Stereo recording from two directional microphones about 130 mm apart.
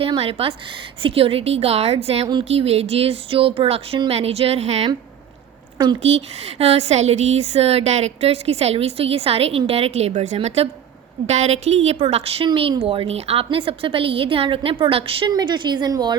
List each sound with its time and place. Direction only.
0.0 s a woman's voice: 45° right (ahead or behind)
5.7 s speech: 35° right (ahead or behind)
6.0 s a woman's voice: 55° right (ahead or behind)
15.3 s a woman's voice: 35° right (ahead or behind)